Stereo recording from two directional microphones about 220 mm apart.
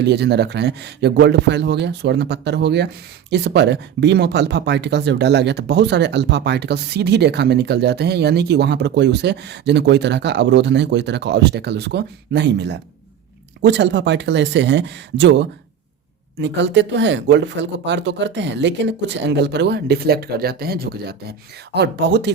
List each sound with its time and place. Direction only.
0.0 s speech: 50° right (ahead or behind)